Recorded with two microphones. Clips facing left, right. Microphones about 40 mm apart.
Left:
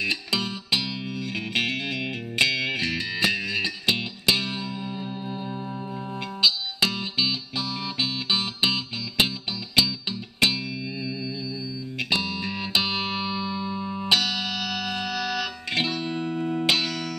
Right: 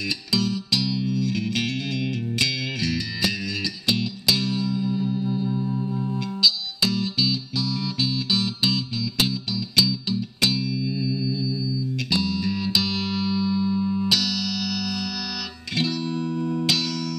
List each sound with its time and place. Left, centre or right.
0.3 s music: left